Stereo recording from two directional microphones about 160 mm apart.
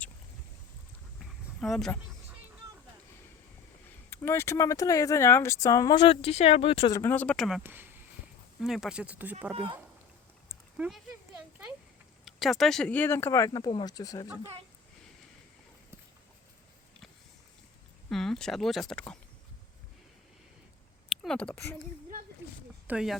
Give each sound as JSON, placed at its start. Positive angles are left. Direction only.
{"t": 1.2, "sound": "a sound", "side_deg": 0}
{"t": 4.1, "sound": "speech", "side_deg": 15}
{"t": 6.9, "sound": "speech", "side_deg": 15}
{"t": 7.6, "sound": "speech", "side_deg": -10}
{"t": 10.5, "sound": "a sound", "side_deg": -5}
{"t": 12.2, "sound": "speech", "side_deg": 0}
{"t": 18.1, "sound": "speech", "side_deg": 5}
{"t": 21.2, "sound": "speech", "side_deg": 5}
{"t": 22.9, "sound": "speech", "side_deg": -5}